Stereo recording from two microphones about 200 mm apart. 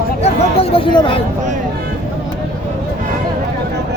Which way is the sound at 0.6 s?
25° left (ahead or behind).